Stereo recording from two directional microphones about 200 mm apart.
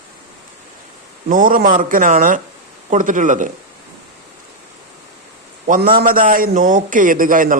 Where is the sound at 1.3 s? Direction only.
40° right (ahead or behind).